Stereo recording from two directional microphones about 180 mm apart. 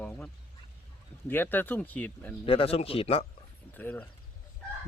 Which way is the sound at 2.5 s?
30° left (ahead or behind).